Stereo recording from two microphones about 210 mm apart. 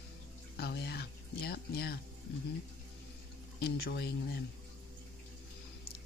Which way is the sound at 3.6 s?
50° left (ahead or behind).